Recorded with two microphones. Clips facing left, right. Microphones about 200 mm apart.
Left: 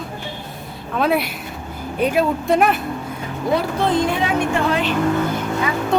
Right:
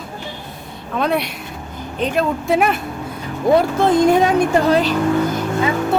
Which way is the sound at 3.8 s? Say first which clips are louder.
Right 6 dB; 40° right (ahead or behind).